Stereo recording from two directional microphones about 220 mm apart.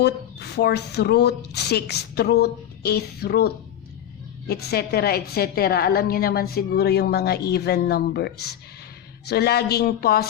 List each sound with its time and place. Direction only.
0.0 s speech: 50° left (ahead or behind)